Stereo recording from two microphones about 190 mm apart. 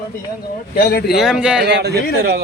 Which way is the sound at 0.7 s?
55° left (ahead or behind).